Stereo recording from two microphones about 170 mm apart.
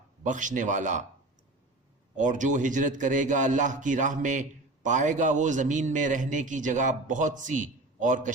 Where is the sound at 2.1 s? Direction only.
45° right (ahead or behind).